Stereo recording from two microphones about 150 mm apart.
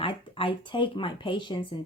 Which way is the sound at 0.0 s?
35° left (ahead or behind).